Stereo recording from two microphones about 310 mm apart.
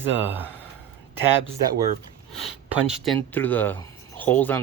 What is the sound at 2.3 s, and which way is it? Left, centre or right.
Speech, centre.